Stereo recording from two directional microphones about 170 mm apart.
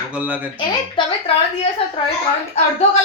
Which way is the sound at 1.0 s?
30° left (ahead or behind).